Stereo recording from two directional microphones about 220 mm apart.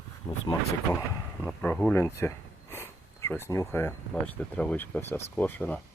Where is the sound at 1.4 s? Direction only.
5° left (ahead or behind).